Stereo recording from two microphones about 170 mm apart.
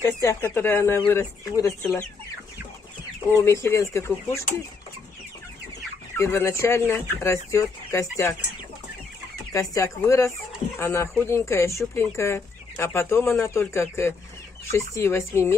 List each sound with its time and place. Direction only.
0.2 s speech: 15° left (ahead or behind)
3.6 s speech: 15° left (ahead or behind)
6.1 s speech: 15° left (ahead or behind)
9.5 s speech: 15° left (ahead or behind)